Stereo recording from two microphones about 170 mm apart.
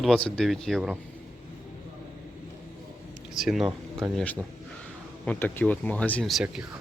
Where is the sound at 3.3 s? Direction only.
Centre (ahead or behind).